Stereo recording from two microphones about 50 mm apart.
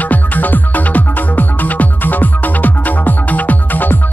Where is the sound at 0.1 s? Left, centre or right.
Left.